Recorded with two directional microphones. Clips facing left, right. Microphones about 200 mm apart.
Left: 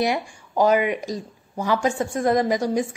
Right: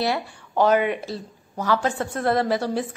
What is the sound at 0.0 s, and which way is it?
A woman's voice, 10° left (ahead or behind).